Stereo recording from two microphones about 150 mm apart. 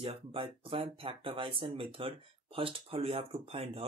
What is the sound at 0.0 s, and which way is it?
Speech, 40° right (ahead or behind).